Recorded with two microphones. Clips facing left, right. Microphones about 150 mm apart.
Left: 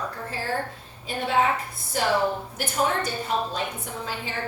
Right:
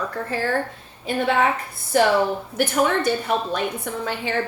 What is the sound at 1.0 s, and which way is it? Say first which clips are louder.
Speech: right 3 dB; 65° right (ahead or behind).